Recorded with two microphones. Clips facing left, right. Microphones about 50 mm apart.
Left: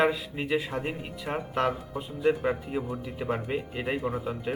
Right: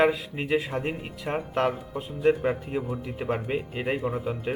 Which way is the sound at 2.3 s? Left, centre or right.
Centre.